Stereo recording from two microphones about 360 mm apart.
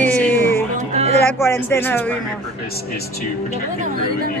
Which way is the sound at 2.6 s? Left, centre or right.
Left.